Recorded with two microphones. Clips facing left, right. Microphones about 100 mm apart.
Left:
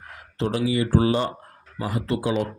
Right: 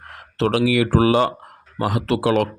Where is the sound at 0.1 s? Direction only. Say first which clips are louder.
Right 6 dB; 80° right.